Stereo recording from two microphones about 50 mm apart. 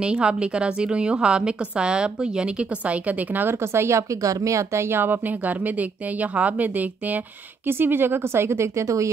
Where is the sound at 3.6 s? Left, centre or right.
Right.